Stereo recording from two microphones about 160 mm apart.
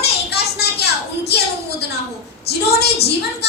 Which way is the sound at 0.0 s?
90° left.